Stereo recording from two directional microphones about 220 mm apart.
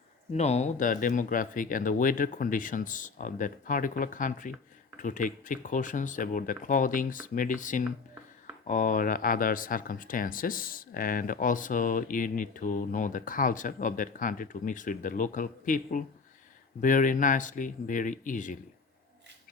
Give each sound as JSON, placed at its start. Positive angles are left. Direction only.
{"t": 0.3, "sound": "speech", "side_deg": 30}